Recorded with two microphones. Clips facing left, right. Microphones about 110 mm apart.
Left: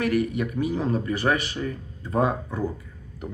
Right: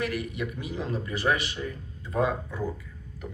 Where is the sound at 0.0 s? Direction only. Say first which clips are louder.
Left 7 dB; 45° left (ahead or behind).